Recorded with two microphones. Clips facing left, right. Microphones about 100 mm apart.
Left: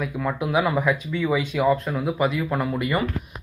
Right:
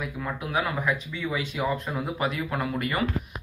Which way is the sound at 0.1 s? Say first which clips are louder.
Left 10 dB; 50° left (ahead or behind).